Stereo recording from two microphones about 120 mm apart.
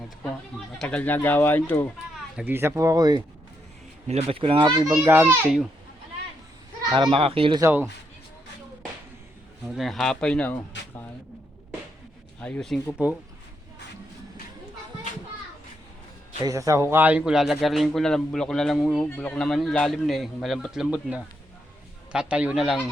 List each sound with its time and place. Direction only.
0.8 s speech: 10° left (ahead or behind)
2.3 s speech: 15° right (ahead or behind); by 3.2 s 35° right (ahead or behind)
4.1 s speech: 50° right (ahead or behind)
4.9 s a child's voice: 20° right (ahead or behind)
6.9 s speech: 45° right (ahead or behind)
7.6 s a child's voice: 15° right (ahead or behind)
9.6 s speech: centre (ahead or behind)
12.4 s a man's voice: 5° left (ahead or behind)
16.4 s a man's voice: 30° right (ahead or behind); by 19.0 s centre (ahead or behind)
19.0 s a man's voice: 15° left (ahead or behind)